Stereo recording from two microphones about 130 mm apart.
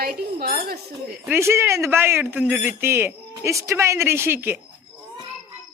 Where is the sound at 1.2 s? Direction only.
20° right (ahead or behind).